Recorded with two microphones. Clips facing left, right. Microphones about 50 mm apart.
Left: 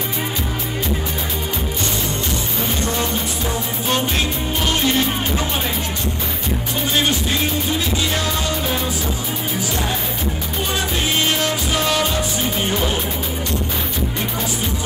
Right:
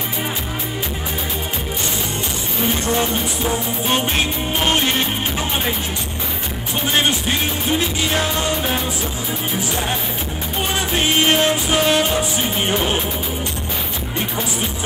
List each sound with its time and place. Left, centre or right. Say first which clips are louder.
3.9 s music: even; right
7.7 s music: right 2 dB; right
11.2 s music: right 4 dB; right